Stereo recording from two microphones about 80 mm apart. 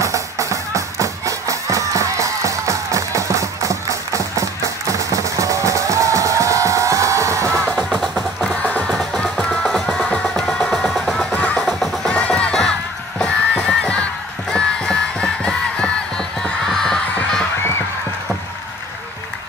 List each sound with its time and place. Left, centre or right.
0.0 s music: right
7.7 s music: centre
8.5 s music: centre
11.6 s music: centre
12.1 s music: centre
14.5 s battle cry: centre
16.4 s a sound: centre